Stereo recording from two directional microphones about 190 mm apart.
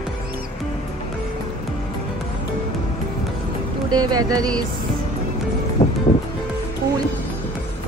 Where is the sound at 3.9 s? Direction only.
20° right (ahead or behind).